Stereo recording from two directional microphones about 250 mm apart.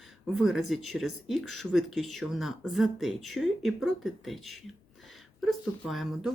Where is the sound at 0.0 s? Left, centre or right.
Centre.